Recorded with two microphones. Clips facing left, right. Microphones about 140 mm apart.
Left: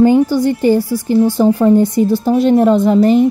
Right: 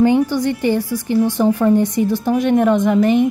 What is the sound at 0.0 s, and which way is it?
A woman's voice, 30° left (ahead or behind).